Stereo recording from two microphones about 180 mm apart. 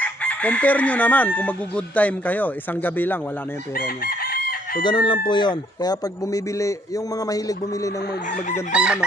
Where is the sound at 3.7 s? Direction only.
55° left (ahead or behind).